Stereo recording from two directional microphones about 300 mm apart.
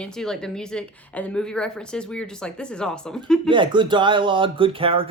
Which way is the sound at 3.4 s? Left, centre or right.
Centre.